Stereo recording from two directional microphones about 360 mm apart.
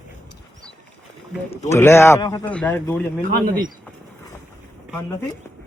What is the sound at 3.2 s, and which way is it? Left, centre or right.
Speech, right.